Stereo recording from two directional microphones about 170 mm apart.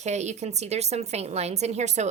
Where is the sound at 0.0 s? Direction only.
40° right (ahead or behind).